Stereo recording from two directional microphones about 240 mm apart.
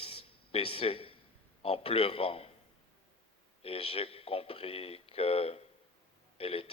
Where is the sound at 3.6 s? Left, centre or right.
Left.